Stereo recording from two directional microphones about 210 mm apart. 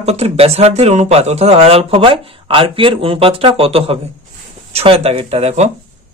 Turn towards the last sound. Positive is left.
turn(degrees=-30)  # may be behind; listen again after turning